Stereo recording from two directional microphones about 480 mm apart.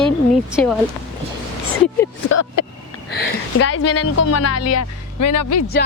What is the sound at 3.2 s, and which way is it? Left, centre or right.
Speech, left.